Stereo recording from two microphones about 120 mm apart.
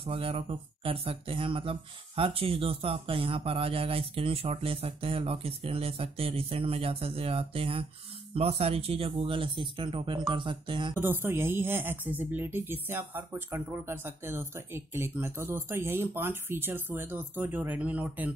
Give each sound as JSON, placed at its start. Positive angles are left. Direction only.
{"t": 0.0, "sound": "speech", "side_deg": -55}
{"t": 11.0, "sound": "speech", "side_deg": -20}